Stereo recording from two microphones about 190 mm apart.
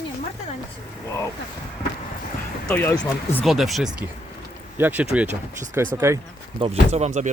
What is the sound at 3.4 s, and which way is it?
Speech, centre (ahead or behind).